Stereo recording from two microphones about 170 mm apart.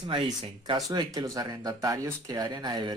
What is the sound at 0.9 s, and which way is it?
Speech, 20° right (ahead or behind).